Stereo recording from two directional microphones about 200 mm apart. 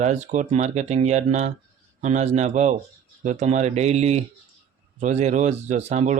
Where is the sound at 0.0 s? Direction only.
35° right (ahead or behind).